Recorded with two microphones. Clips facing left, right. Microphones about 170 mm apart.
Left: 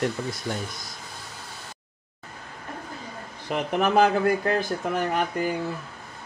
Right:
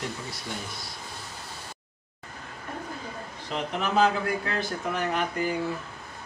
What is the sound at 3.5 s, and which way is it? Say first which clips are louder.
Speech: left 6 dB; 55° left (ahead or behind).